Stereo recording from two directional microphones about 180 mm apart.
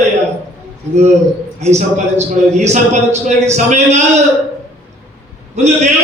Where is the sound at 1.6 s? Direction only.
40° right (ahead or behind).